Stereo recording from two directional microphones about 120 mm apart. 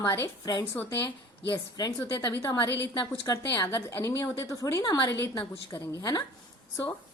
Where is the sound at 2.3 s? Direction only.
25° left (ahead or behind).